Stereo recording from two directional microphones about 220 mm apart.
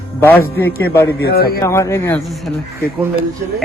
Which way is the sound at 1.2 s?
45° left (ahead or behind).